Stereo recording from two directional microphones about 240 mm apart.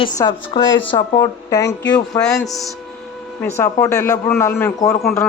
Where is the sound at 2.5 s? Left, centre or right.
Centre.